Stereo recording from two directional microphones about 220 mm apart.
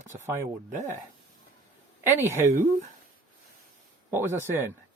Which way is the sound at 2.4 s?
35° right (ahead or behind).